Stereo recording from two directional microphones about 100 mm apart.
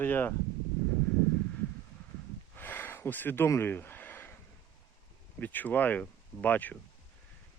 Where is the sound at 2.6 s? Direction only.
20° left (ahead or behind).